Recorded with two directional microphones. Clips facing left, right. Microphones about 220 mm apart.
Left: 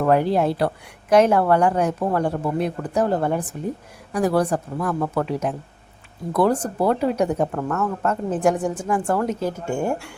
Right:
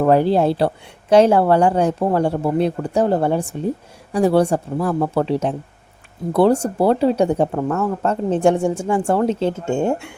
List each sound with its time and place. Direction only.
0.0 s speech: 30° right (ahead or behind)